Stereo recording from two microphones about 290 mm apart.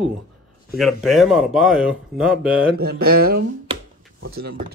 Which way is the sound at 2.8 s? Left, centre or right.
Right.